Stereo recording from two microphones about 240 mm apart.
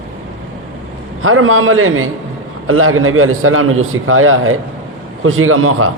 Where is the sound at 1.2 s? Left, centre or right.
Right.